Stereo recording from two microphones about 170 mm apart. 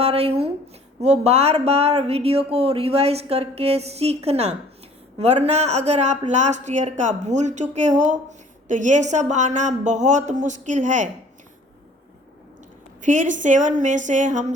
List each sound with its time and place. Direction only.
0.0 s speech: 35° right (ahead or behind)
13.0 s speech: 45° right (ahead or behind)